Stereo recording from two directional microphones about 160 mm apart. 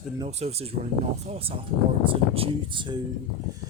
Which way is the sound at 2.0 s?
35° right (ahead or behind).